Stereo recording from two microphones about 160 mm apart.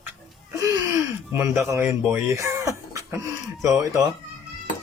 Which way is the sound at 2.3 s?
20° right (ahead or behind).